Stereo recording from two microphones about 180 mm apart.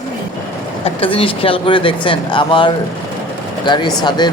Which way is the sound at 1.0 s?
30° left (ahead or behind).